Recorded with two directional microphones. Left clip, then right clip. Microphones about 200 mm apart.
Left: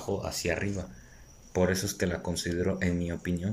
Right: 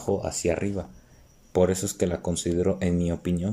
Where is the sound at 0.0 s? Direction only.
20° right (ahead or behind).